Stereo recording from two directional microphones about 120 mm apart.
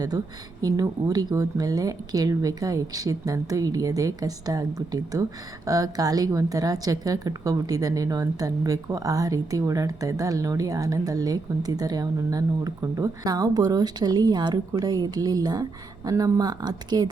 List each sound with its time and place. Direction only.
0.6 s a woman's voice: 30° right (ahead or behind)